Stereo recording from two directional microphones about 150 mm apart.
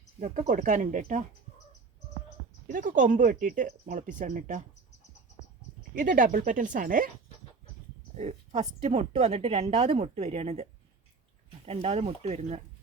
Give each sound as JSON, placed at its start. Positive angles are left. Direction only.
{"t": 0.2, "sound": "speech", "side_deg": -55}
{"t": 2.6, "sound": "speech", "side_deg": -60}
{"t": 5.9, "sound": "speech", "side_deg": -60}
{"t": 8.1, "sound": "a woman's voice", "side_deg": -50}